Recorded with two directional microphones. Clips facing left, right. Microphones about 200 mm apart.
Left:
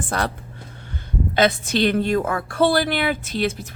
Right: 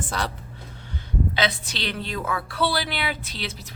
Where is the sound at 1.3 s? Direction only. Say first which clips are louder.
Left 13 dB; 50° left (ahead or behind).